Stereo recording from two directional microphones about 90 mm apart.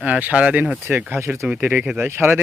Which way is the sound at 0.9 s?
25° right (ahead or behind).